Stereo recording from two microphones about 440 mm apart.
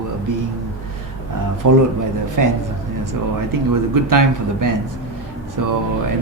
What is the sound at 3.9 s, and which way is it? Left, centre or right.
Speech, right.